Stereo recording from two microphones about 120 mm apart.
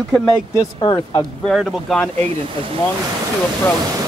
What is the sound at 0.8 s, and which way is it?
Speech, 40° left (ahead or behind).